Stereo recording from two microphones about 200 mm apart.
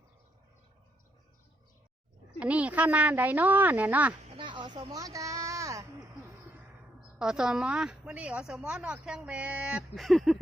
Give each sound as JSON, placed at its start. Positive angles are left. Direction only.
{"t": 2.4, "sound": "speech", "side_deg": -5}
{"t": 4.4, "sound": "a sound", "side_deg": -25}
{"t": 7.2, "sound": "a woman's voice", "side_deg": -5}